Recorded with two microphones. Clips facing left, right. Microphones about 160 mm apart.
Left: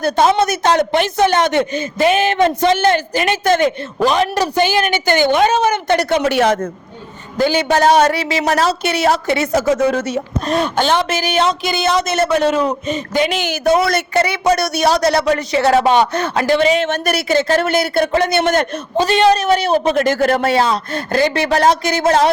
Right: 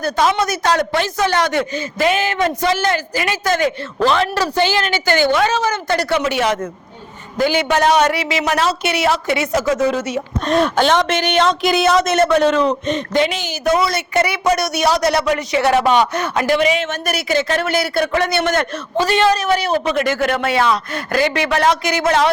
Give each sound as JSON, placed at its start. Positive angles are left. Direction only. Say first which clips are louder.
{"t": 0.0, "sound": "a man's voice", "louder": "left 3 dB", "side_deg": 25}
{"t": 6.1, "sound": "speech", "louder": "left 3 dB", "side_deg": 45}
{"t": 7.3, "sound": "speech", "louder": "left 2 dB", "side_deg": 30}
{"t": 10.4, "sound": "speech", "louder": "right 3 dB", "side_deg": 0}
{"t": 14.1, "sound": "a man's voice", "louder": "left 2 dB", "side_deg": 25}